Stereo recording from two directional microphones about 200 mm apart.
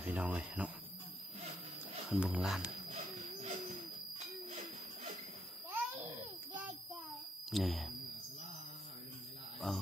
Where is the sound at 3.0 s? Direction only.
35° right (ahead or behind).